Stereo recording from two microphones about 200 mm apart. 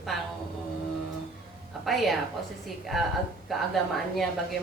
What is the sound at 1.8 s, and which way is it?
Speech, centre (ahead or behind).